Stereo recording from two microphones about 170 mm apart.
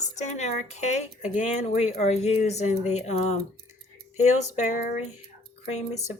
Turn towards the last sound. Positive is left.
turn(degrees=40)  # may be behind; listen again after turning